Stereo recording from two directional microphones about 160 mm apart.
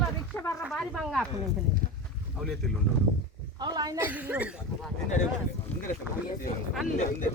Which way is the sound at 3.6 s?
25° right (ahead or behind).